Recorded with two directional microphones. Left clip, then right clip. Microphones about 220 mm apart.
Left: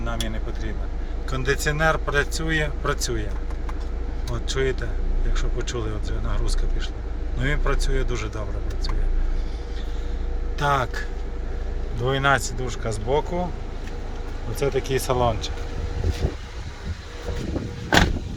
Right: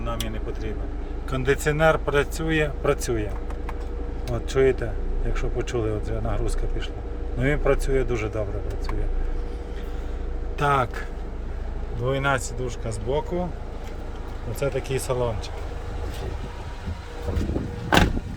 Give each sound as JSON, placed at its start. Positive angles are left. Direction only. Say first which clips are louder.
{"t": 1.3, "sound": "a man's voice", "louder": "right 1 dB", "side_deg": -15}
{"t": 4.4, "sound": "speech", "louder": "right 5 dB", "side_deg": -20}
{"t": 10.6, "sound": "a man's voice", "louder": "even", "side_deg": -15}
{"t": 12.0, "sound": "speech", "louder": "left 3 dB", "side_deg": 0}
{"t": 14.6, "sound": "speech", "louder": "left 3 dB", "side_deg": -5}